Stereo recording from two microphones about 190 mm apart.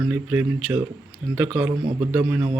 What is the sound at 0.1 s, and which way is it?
A man's voice, 10° right (ahead or behind).